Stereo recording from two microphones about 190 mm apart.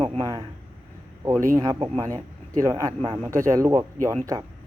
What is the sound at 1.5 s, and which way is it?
A man's voice, 20° right (ahead or behind).